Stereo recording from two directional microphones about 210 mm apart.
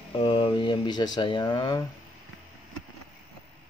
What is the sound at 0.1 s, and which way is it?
Speech, 25° left (ahead or behind).